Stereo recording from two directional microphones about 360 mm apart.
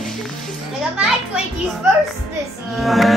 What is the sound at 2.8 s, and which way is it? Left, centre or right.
Speech, centre.